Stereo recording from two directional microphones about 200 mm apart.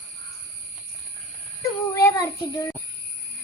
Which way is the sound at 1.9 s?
15° left (ahead or behind).